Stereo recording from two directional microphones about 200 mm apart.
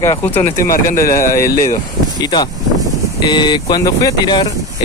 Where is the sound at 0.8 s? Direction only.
45° left (ahead or behind).